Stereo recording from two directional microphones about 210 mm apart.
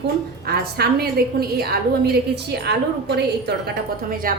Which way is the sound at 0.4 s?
50° right (ahead or behind).